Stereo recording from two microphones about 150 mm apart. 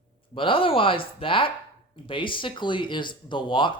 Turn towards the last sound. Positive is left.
turn(degrees=35)  # may be behind; listen again after turning